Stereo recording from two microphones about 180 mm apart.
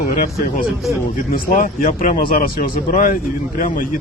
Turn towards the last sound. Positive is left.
turn(degrees=50)  # may be behind; listen again after turning